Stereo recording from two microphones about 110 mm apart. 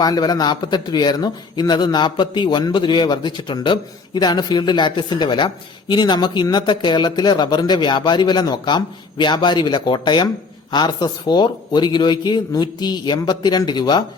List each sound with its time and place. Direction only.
0.0 s speech: 40° left (ahead or behind)